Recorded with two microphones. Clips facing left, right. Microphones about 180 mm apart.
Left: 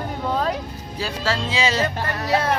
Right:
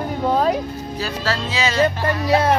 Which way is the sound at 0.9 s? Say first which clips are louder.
Even; 20° left (ahead or behind).